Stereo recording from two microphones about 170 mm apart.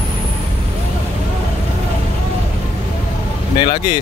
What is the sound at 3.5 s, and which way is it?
Speech, 30° left (ahead or behind).